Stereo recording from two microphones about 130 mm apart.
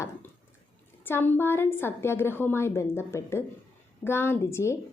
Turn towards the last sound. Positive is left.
turn(degrees=20)  # may be behind; listen again after turning